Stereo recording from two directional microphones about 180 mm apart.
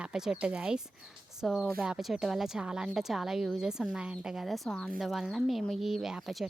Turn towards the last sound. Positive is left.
turn(degrees=0)  # may be behind; listen again after turning